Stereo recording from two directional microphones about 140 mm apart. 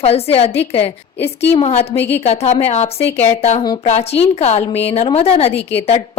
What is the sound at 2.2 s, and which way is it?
A woman's voice, 50° left (ahead or behind).